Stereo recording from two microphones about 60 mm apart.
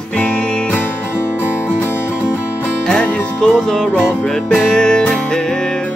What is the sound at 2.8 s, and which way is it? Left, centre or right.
Music, centre.